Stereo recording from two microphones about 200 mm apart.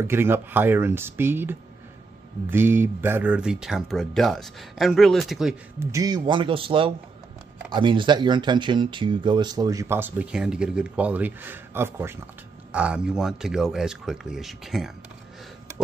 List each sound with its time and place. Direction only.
0.0 s speech: 10° right (ahead or behind)
5.8 s speech: 15° right (ahead or behind)